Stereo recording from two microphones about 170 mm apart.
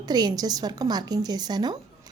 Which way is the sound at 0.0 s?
25° right (ahead or behind).